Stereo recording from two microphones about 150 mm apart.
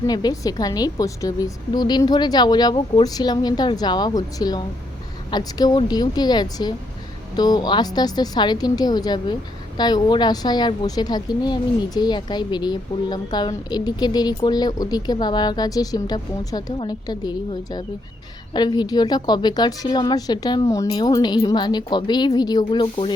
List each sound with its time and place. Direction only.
0.1 s a woman's voice: 25° left (ahead or behind)